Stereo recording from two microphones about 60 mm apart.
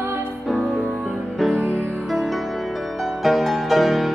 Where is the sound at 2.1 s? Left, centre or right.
Centre.